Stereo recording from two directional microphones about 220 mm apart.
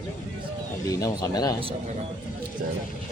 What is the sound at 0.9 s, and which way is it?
Speech, 15° left (ahead or behind).